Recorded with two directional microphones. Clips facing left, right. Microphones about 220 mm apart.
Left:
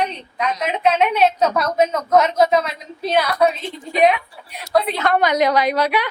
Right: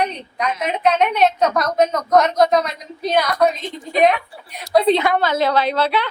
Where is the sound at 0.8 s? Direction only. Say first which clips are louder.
Even; 5° left (ahead or behind).